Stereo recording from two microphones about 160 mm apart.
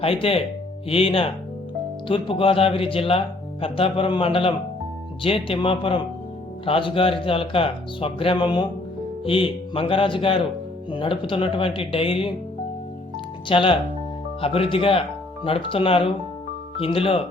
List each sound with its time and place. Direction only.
0.0 s speech: 35° left (ahead or behind)
13.5 s speech: 35° left (ahead or behind)